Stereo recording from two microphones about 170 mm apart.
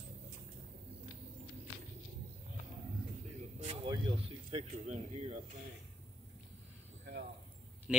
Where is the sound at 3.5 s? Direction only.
35° right (ahead or behind).